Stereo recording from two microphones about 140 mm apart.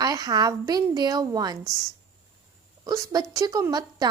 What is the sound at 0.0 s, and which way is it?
Speech, 25° right (ahead or behind).